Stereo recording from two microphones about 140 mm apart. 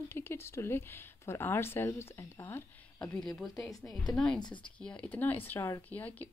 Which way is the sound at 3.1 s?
Centre (ahead or behind).